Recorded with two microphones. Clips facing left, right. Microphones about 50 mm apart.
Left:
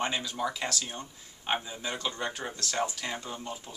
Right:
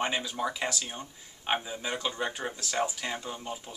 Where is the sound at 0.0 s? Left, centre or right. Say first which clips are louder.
Right 1 dB; centre.